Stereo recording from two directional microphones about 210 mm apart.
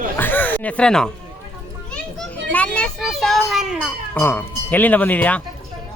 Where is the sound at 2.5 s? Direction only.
5° left (ahead or behind).